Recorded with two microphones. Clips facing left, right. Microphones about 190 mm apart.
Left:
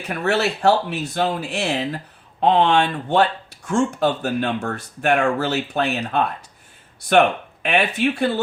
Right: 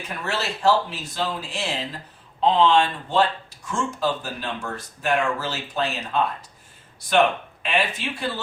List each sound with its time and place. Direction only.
0.1 s speech: 60° left (ahead or behind)